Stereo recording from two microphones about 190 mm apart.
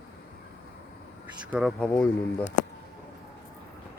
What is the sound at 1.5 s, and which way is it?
Speech, centre (ahead or behind).